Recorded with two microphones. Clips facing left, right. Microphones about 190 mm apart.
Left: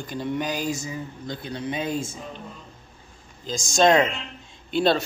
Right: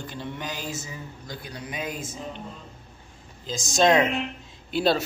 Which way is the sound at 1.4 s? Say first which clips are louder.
Left 6 dB; 25° left (ahead or behind).